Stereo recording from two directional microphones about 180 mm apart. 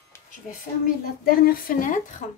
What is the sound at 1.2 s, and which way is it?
Speech, 55° left (ahead or behind).